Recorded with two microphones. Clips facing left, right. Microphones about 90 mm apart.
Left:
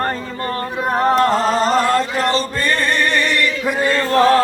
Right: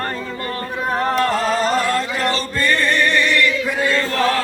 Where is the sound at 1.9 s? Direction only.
25° left (ahead or behind).